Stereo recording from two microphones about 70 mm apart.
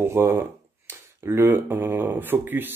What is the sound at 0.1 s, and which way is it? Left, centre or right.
Speech, right.